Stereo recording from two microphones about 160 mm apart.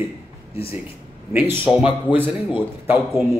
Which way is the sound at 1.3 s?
10° right (ahead or behind).